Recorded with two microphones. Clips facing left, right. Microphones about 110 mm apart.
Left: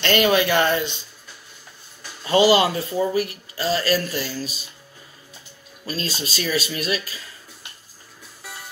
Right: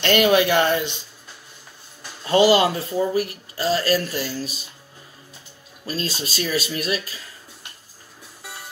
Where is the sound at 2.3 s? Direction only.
50° right (ahead or behind).